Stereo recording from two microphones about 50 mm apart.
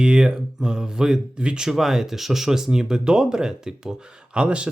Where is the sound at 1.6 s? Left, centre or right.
Centre.